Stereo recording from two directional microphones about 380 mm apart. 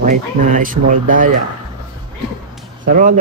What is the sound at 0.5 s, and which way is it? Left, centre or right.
Speech, right.